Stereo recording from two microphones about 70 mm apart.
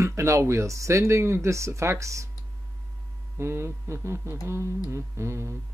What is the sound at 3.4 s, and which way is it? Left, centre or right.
Speech, right.